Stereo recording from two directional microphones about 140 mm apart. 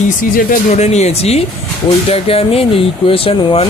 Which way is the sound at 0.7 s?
55° left (ahead or behind).